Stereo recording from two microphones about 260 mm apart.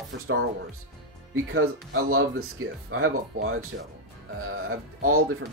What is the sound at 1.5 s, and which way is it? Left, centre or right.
Speech, right.